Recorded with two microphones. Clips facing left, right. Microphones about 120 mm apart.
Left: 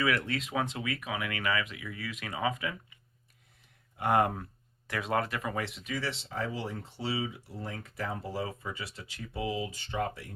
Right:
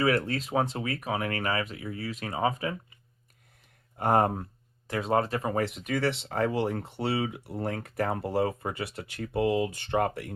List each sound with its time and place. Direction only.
0.0 s speech: 35° right (ahead or behind); by 10.3 s 60° right (ahead or behind)